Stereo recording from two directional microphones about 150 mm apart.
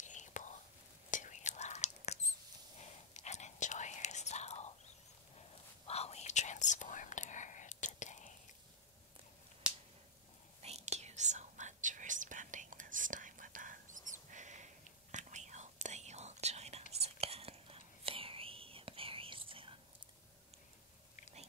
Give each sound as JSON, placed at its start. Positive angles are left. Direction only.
{"t": 0.0, "sound": "whispering", "side_deg": 55}
{"t": 5.9, "sound": "whispering", "side_deg": 45}
{"t": 9.6, "sound": "finger snapping", "side_deg": -5}
{"t": 10.6, "sound": "whispering", "side_deg": -45}